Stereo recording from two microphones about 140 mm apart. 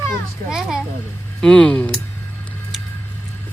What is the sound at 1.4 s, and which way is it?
Speech, 5° left (ahead or behind).